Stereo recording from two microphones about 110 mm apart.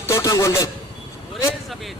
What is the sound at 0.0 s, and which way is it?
Speech, 30° left (ahead or behind).